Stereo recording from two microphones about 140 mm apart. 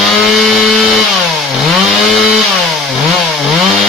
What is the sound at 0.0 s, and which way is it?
Chainsaw, centre (ahead or behind).